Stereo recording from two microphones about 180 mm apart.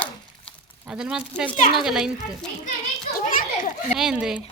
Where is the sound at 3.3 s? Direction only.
50° left (ahead or behind).